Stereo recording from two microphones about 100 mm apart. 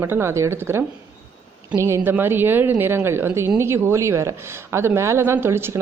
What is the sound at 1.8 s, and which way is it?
Speech, 25° right (ahead or behind).